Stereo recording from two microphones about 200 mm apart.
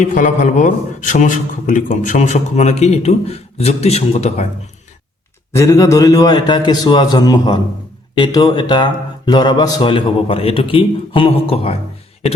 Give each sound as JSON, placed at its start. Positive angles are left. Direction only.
{"t": 0.0, "sound": "a man's voice", "side_deg": 40}
{"t": 5.5, "sound": "speech", "side_deg": 15}